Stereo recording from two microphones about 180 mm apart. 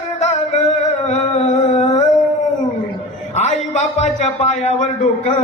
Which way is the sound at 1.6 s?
40° left (ahead or behind).